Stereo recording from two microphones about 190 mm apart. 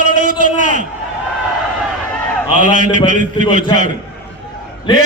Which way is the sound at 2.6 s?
40° right (ahead or behind).